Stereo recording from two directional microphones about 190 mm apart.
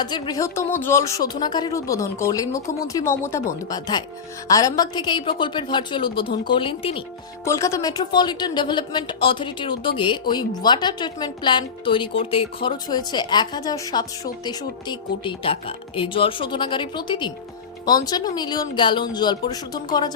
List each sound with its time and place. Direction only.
0.0 s speech: 20° left (ahead or behind)
7.4 s speech: 15° left (ahead or behind)